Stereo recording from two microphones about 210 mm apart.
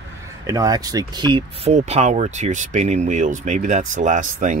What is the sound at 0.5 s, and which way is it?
Speech, 15° right (ahead or behind).